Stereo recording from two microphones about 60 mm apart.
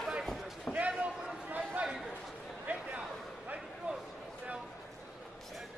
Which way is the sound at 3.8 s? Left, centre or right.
Right.